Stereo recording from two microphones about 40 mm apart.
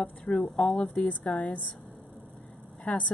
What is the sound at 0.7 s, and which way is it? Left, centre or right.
Speech, left.